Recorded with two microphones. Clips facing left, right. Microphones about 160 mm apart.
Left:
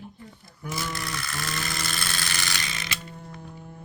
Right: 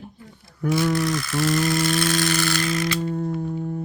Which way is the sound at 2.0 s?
Centre (ahead or behind).